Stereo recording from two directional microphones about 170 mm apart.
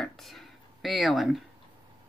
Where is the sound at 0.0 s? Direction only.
Centre (ahead or behind).